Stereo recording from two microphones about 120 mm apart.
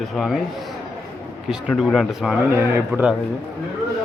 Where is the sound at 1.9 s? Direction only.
Centre (ahead or behind).